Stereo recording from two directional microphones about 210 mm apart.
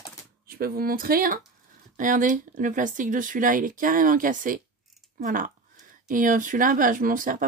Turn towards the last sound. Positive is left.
turn(degrees=-40)  # may be behind; listen again after turning